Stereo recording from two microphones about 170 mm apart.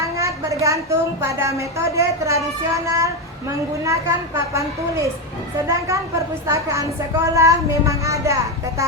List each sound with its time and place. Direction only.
0.0 s a woman's voice: 20° right (ahead or behind)